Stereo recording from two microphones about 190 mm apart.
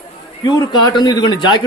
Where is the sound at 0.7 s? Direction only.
20° left (ahead or behind).